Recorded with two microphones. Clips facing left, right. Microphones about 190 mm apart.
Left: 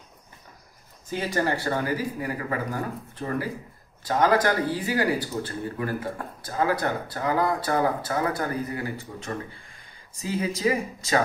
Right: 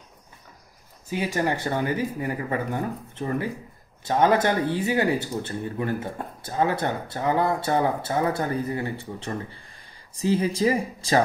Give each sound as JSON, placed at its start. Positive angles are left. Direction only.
{"t": 1.1, "sound": "speech", "side_deg": -15}